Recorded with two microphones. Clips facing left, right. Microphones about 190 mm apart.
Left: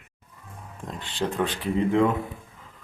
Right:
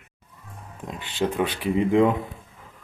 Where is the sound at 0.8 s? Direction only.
5° right (ahead or behind).